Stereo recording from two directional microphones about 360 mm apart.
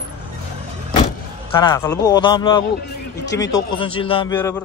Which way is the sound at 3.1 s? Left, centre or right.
Left.